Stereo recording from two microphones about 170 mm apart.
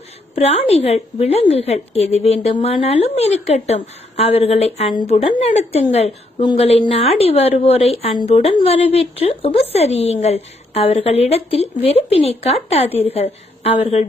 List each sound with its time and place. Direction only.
0.3 s a woman's voice: 40° left (ahead or behind)
6.4 s speech: 25° left (ahead or behind)
6.7 s a woman's voice: 35° left (ahead or behind)